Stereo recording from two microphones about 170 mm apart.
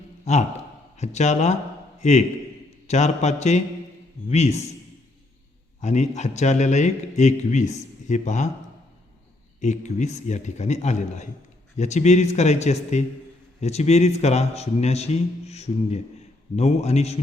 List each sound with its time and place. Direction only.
0.3 s a man's voice: 40° left (ahead or behind)
5.8 s a man's voice: 40° left (ahead or behind)
9.6 s a man's voice: 45° left (ahead or behind)